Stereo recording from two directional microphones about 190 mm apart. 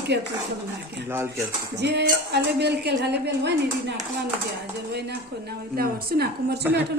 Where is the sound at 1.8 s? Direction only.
60° right (ahead or behind).